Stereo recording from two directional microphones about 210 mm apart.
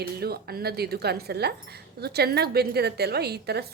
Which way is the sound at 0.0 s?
50° right (ahead or behind).